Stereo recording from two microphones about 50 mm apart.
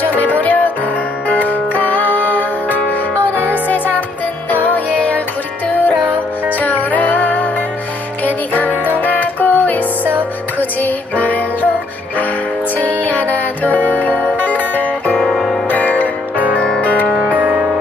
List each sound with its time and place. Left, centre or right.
0.0 s music: left
13.0 s music: left
15.1 s music: centre
15.7 s music: left
16.3 s music: right